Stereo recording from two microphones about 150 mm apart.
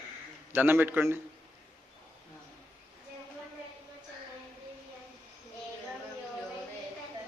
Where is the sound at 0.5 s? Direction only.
15° right (ahead or behind).